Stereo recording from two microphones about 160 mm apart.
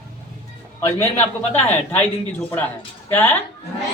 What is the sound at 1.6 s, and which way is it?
Speech, 10° left (ahead or behind).